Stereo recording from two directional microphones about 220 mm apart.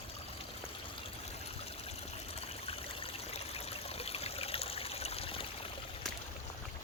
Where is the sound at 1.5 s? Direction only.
25° left (ahead or behind).